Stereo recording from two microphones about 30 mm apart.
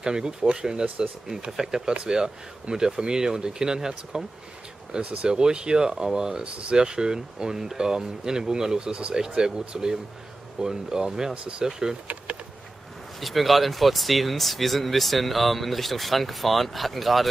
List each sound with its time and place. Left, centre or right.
0.0 s speech: right
13.2 s speech: centre